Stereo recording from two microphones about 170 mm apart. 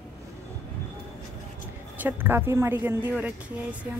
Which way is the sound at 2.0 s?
10° right (ahead or behind).